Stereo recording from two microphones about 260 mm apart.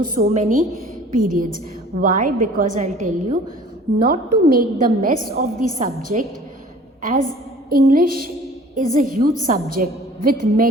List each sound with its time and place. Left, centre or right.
0.0 s a woman's voice: right